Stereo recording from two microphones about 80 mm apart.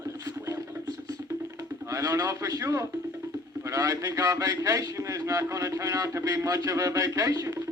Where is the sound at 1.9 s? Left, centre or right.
Right.